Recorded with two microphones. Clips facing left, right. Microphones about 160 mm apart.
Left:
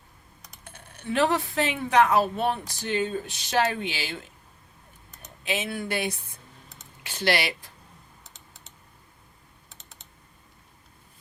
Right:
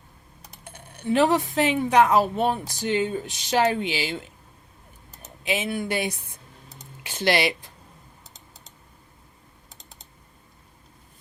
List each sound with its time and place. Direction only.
0.6 s speech: 15° right (ahead or behind)
5.5 s speech: 15° right (ahead or behind)
7.0 s typing: 20° right (ahead or behind)